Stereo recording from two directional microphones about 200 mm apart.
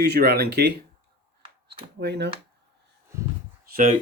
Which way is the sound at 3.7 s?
40° right (ahead or behind).